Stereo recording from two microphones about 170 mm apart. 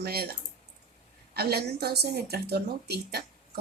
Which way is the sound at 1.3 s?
70° right (ahead or behind).